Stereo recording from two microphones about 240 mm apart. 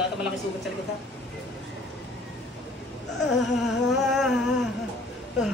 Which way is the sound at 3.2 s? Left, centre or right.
Left.